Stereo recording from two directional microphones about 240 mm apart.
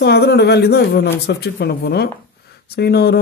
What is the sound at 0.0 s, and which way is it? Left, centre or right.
Speech, left.